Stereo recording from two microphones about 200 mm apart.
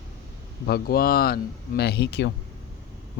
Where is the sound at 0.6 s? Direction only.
50° left (ahead or behind).